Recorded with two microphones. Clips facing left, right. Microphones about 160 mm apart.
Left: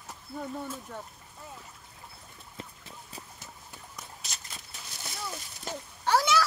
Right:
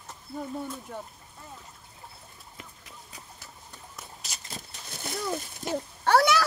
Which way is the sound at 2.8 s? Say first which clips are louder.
Left 2 dB; 30° left (ahead or behind).